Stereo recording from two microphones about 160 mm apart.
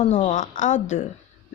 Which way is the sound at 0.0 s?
45° left (ahead or behind).